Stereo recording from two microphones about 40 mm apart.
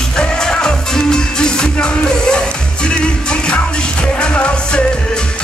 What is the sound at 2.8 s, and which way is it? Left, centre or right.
Music, left.